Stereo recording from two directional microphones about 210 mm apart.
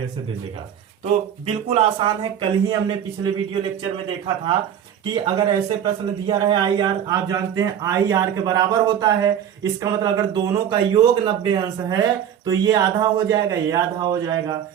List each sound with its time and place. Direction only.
1.0 s a man's voice: 30° right (ahead or behind)
5.1 s a man's voice: 20° right (ahead or behind)